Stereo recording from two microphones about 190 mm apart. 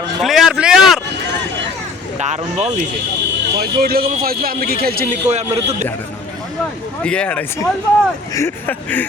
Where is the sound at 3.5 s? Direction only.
55° right (ahead or behind).